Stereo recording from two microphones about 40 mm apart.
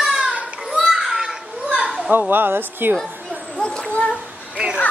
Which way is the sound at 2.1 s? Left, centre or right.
Right.